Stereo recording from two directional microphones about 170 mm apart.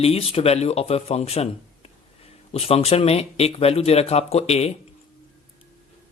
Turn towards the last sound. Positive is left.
turn(degrees=40)  # may be behind; listen again after turning